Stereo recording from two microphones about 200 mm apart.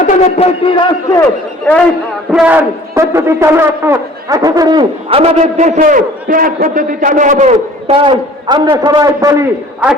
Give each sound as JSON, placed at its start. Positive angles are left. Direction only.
{"t": 0.0, "sound": "speech", "side_deg": 30}
{"t": 1.7, "sound": "a man's voice", "side_deg": 10}
{"t": 2.3, "sound": "a man's voice", "side_deg": -5}